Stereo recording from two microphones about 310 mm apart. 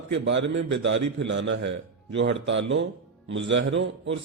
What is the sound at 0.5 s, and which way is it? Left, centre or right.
A man's voice, right.